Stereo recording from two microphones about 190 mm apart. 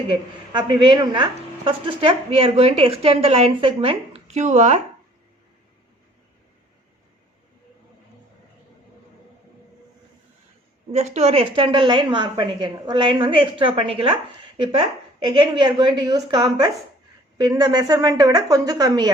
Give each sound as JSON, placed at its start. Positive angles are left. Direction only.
{"t": 0.1, "sound": "a woman's voice", "side_deg": -25}
{"t": 10.9, "sound": "a woman's voice", "side_deg": -35}